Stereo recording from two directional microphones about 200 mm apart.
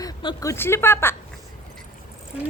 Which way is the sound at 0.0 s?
20° left (ahead or behind).